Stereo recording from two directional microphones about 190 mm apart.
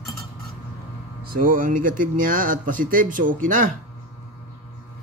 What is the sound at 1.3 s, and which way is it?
Speech, 45° right (ahead or behind).